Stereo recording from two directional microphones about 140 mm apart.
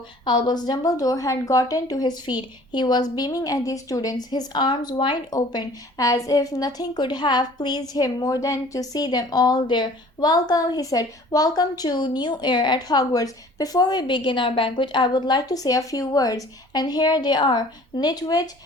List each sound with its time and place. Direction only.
0.3 s a woman's voice: 30° left (ahead or behind)